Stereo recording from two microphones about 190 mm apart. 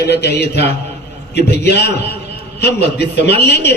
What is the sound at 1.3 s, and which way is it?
A man's voice, 60° left (ahead or behind).